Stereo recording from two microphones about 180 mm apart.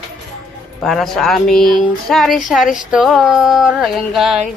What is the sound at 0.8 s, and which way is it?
Speech, centre (ahead or behind).